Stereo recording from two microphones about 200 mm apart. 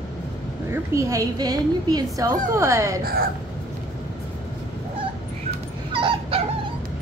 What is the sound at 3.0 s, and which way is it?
Speech, 50° right (ahead or behind).